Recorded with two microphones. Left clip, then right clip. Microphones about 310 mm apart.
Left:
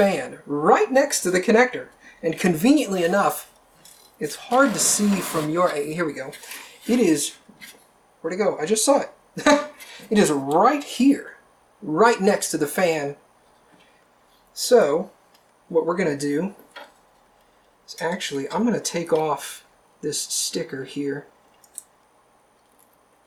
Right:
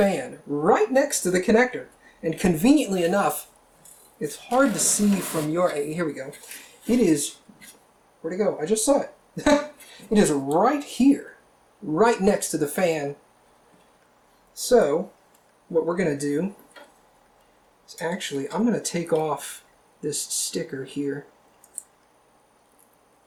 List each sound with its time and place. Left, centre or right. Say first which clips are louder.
0.0 s speech: left 2 dB; centre
0.3 s speech: left 2 dB; centre
0.9 s speech: left 2 dB; centre
14.6 s speech: left 2 dB; centre
15.7 s speech: left 2 dB; centre
16.0 s speech: left 1 dB; centre
17.8 s speech: left 3 dB; centre